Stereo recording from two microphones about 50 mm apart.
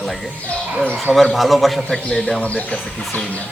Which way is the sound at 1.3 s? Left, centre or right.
Centre.